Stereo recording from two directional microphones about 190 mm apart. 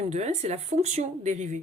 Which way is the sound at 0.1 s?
35° right (ahead or behind).